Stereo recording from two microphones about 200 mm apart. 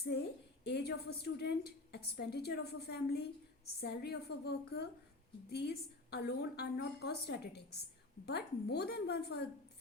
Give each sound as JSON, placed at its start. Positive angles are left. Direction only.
{"t": 0.7, "sound": "a woman's voice", "side_deg": 55}